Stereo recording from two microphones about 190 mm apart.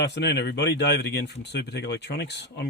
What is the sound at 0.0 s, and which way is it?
Speech, 65° left (ahead or behind).